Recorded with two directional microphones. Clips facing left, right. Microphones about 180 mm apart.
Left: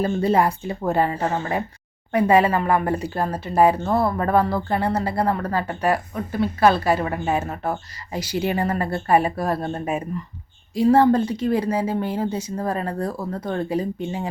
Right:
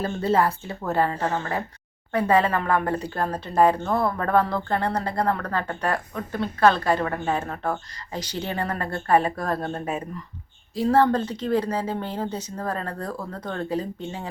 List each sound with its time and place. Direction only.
0.0 s speech: 15° left (ahead or behind)